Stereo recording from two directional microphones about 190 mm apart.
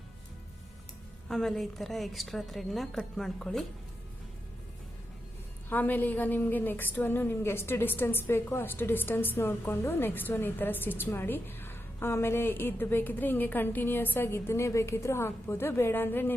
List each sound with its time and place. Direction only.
1.3 s a woman's voice: centre (ahead or behind)
5.6 s a woman's voice: 10° left (ahead or behind)